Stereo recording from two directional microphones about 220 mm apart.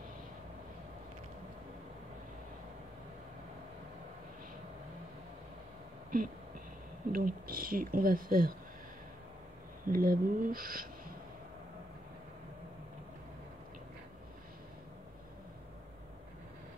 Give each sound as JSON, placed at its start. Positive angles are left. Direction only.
{"t": 7.1, "sound": "speech", "side_deg": -40}
{"t": 9.8, "sound": "speech", "side_deg": -40}